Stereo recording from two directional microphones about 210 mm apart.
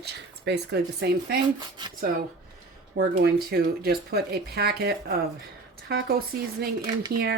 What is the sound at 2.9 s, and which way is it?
Speech, 45° right (ahead or behind).